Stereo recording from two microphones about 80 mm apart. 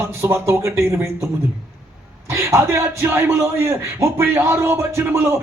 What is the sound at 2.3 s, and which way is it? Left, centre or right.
Speech, right.